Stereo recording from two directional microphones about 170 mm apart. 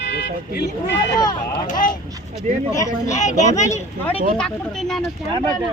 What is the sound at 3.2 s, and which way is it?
Speech, 45° left (ahead or behind).